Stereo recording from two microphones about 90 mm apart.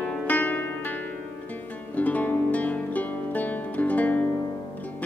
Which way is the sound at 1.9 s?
20° left (ahead or behind).